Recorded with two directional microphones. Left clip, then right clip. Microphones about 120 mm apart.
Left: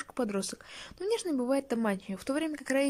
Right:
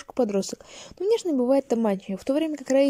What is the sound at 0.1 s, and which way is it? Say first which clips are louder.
Speech: right 10 dB; 35° right (ahead or behind).